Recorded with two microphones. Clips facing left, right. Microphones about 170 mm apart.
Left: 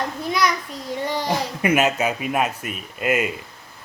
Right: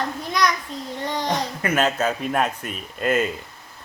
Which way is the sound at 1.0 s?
10° left (ahead or behind).